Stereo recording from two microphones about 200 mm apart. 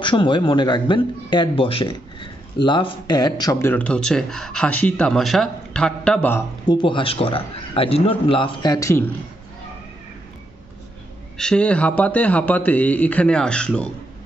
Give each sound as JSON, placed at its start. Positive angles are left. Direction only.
{"t": 0.0, "sound": "speech", "side_deg": 25}
{"t": 3.7, "sound": "speech", "side_deg": 5}
{"t": 6.7, "sound": "speech", "side_deg": 25}
{"t": 11.3, "sound": "speech", "side_deg": 5}